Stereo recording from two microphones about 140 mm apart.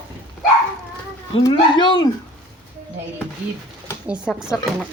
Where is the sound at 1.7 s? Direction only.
35° left (ahead or behind).